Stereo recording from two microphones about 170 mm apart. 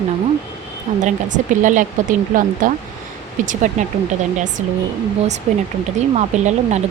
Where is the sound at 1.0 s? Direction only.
50° right (ahead or behind).